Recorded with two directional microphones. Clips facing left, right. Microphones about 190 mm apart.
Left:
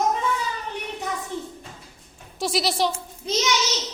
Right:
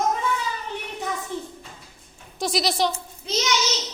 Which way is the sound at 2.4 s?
5° left (ahead or behind).